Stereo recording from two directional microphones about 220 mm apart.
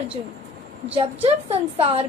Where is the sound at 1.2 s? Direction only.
25° right (ahead or behind).